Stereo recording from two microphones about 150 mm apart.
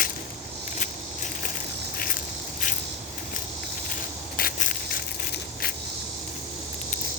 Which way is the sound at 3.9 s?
70° left (ahead or behind).